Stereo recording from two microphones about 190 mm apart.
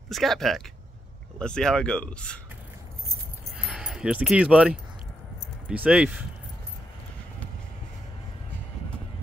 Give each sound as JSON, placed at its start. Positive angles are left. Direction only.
{"t": 0.1, "sound": "speech", "side_deg": 0}
{"t": 3.5, "sound": "a sound", "side_deg": -5}
{"t": 5.7, "sound": "speech", "side_deg": -5}